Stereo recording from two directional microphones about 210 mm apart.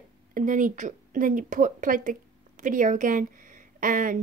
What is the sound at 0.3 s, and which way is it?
Speech, 40° right (ahead or behind).